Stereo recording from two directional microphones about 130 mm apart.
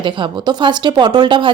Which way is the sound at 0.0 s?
40° right (ahead or behind).